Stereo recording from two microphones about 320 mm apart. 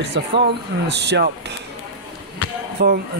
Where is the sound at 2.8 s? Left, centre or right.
Right.